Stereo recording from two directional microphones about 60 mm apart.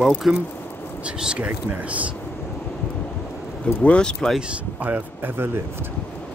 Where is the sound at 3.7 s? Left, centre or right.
Left.